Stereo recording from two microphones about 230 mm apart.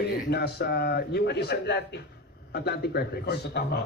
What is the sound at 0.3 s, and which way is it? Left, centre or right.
Speech, left.